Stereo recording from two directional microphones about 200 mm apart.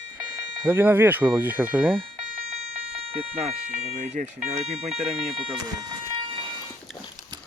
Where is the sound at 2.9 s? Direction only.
30° right (ahead or behind).